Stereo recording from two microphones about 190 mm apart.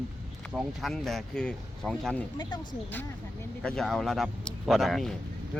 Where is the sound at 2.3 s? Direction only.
25° left (ahead or behind).